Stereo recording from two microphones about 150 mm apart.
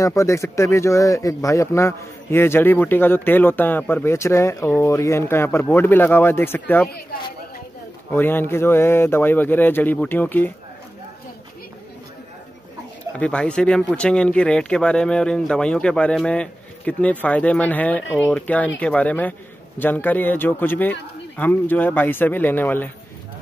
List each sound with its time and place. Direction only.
0.0 s speech: 20° left (ahead or behind)
8.1 s speech: 15° left (ahead or behind)
13.1 s speech: 10° left (ahead or behind)